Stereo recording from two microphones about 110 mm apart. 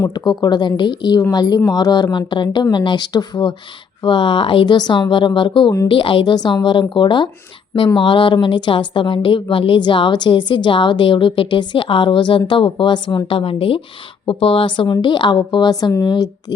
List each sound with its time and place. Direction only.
0.1 s a woman's voice: 40° left (ahead or behind)